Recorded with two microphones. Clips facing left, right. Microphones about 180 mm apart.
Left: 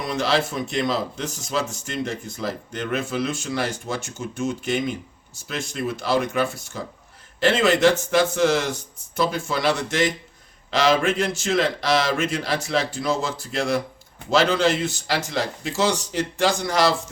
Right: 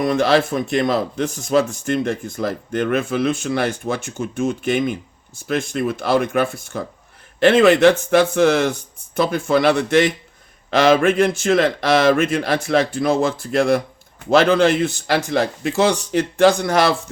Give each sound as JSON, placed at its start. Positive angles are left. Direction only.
{"t": 0.0, "sound": "speech", "side_deg": -55}